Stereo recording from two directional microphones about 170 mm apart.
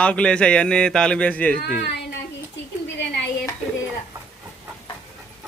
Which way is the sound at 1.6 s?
70° left (ahead or behind).